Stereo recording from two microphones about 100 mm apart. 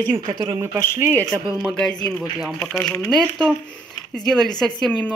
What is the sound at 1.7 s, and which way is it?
Speech, 10° left (ahead or behind).